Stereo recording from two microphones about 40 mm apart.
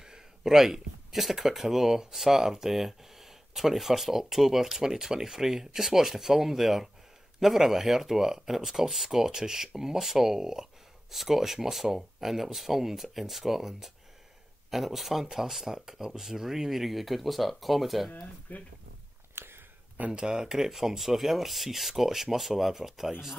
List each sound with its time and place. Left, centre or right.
0.0 s speech: centre
18.5 s speech: left
19.3 s a sound: right
20.1 s speech: centre